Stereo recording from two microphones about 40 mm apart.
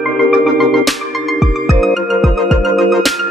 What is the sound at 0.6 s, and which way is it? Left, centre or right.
Music, centre.